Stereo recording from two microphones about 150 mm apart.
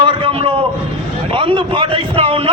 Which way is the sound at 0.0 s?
35° right (ahead or behind).